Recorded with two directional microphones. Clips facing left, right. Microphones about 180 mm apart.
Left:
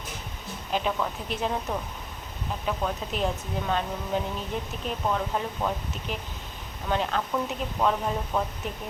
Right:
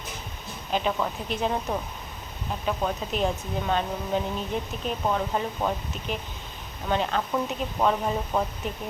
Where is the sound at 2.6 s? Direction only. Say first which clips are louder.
Right 2 dB; 5° right (ahead or behind).